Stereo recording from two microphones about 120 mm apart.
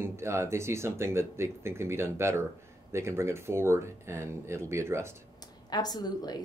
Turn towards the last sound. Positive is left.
turn(degrees=35)  # may be behind; listen again after turning